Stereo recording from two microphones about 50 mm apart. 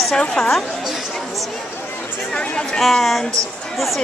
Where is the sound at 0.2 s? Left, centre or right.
Centre.